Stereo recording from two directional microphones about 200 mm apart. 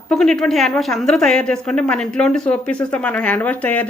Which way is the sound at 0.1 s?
Centre (ahead or behind).